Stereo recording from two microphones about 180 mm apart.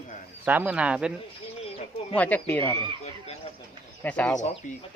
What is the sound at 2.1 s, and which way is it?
Speech, 10° left (ahead or behind).